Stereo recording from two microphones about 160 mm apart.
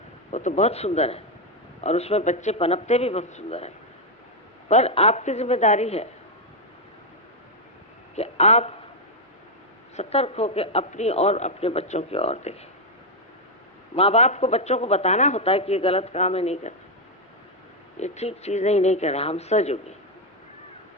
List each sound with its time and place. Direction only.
0.3 s a man's voice: 45° left (ahead or behind)
4.7 s speech: 40° left (ahead or behind)
8.1 s speech: 45° left (ahead or behind)
9.9 s a man's voice: 40° left (ahead or behind)
13.9 s a man's voice: 40° left (ahead or behind)
17.9 s speech: 45° left (ahead or behind)